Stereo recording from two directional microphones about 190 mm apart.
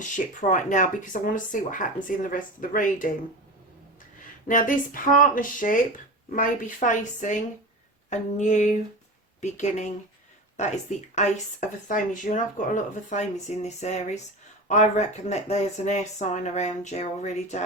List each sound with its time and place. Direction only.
0.2 s speech: 45° left (ahead or behind)
4.4 s speech: 45° left (ahead or behind)